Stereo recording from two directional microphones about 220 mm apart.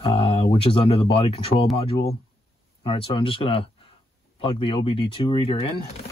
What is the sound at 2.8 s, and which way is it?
Speech, 25° left (ahead or behind).